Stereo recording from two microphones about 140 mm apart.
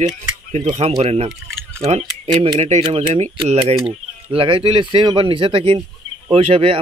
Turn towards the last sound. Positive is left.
turn(degrees=-40)  # may be behind; listen again after turning